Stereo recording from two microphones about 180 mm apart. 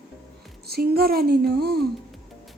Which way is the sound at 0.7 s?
55° right (ahead or behind).